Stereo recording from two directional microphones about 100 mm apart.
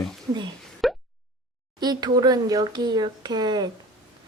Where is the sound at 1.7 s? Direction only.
45° right (ahead or behind).